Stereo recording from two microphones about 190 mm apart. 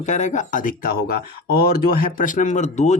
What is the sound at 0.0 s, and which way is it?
Speech, 40° left (ahead or behind).